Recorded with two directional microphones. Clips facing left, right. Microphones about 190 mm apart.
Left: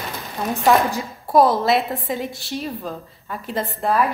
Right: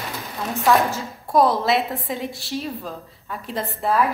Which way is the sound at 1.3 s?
Centre (ahead or behind).